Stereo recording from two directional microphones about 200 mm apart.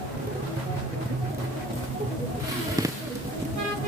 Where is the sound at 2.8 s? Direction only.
15° right (ahead or behind).